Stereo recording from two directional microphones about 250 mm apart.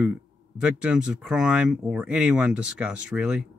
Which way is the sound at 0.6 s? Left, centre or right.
Centre.